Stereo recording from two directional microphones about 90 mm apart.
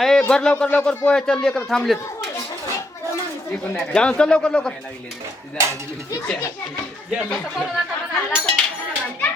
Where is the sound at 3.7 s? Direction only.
10° left (ahead or behind).